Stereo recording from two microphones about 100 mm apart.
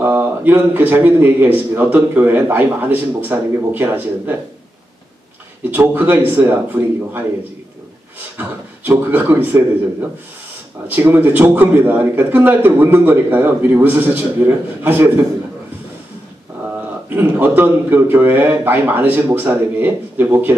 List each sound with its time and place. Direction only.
0.0 s speech: 20° right (ahead or behind)
5.6 s a man's voice: 20° right (ahead or behind)
8.4 s speech: 20° right (ahead or behind)
10.9 s speech: 20° right (ahead or behind)
17.1 s speech: 20° right (ahead or behind)